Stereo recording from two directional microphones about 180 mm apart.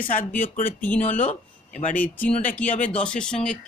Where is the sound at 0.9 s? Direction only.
10° left (ahead or behind).